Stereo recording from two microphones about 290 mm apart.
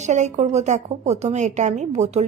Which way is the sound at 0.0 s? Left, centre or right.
Right.